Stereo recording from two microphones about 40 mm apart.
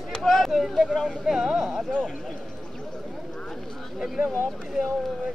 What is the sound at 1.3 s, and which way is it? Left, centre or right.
Speech, centre.